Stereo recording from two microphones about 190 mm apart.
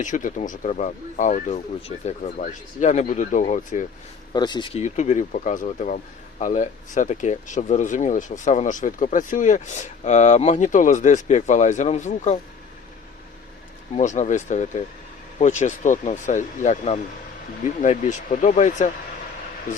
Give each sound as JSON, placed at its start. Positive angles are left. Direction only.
{"t": 0.0, "sound": "speech", "side_deg": 45}
{"t": 4.4, "sound": "speech", "side_deg": 20}
{"t": 13.9, "sound": "speech", "side_deg": 40}